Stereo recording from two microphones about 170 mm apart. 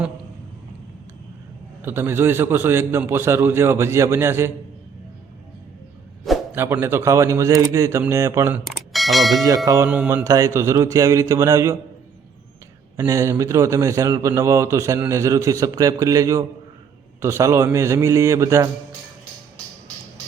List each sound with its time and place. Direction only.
1.8 s a man's voice: 15° right (ahead or behind)
6.5 s a man's voice: 15° right (ahead or behind)
8.6 s bell: centre (ahead or behind)
9.6 s a man's voice: 20° right (ahead or behind)
9.9 s a man's voice: 5° right (ahead or behind)
10.2 s a man's voice: 20° right (ahead or behind)
13.0 s a man's voice: 15° right (ahead or behind)